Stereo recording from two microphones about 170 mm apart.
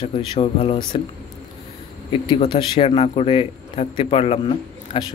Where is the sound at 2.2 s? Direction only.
30° left (ahead or behind).